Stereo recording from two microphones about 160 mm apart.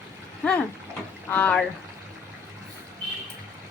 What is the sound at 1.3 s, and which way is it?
Speech, 10° left (ahead or behind).